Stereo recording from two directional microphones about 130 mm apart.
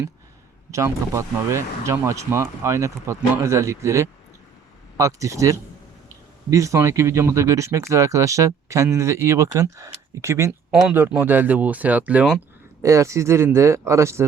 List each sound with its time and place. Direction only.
0.7 s speech: 25° right (ahead or behind)
10.8 s speech: 10° right (ahead or behind)
12.8 s speech: 25° right (ahead or behind)